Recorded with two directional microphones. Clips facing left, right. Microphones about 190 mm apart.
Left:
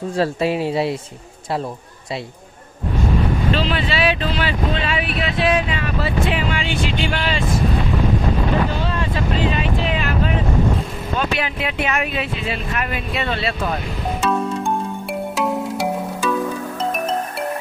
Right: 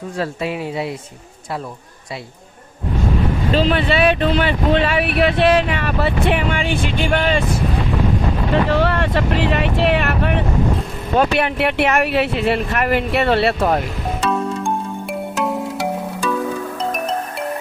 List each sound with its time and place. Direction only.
0.2 s speech: 30° left (ahead or behind)
3.5 s speech: 50° right (ahead or behind)
8.6 s speech: 70° right (ahead or behind)
14.2 s music: centre (ahead or behind)